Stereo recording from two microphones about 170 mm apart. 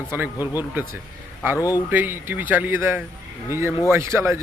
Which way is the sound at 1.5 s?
20° left (ahead or behind).